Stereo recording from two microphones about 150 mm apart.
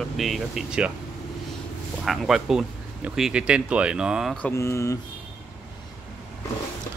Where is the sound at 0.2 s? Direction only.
Centre (ahead or behind).